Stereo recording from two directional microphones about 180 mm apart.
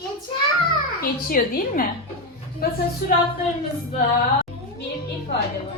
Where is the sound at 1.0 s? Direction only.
50° left (ahead or behind).